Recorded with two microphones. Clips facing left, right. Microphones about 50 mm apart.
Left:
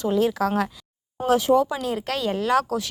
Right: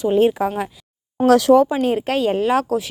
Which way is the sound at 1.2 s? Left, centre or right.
Right.